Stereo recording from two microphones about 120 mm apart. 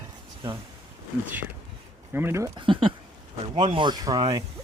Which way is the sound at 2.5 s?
45° right (ahead or behind).